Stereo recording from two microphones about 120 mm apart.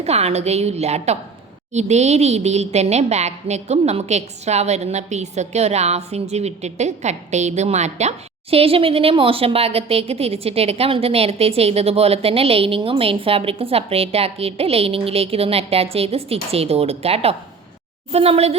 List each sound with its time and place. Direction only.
0.0 s a woman's voice: 60° right (ahead or behind)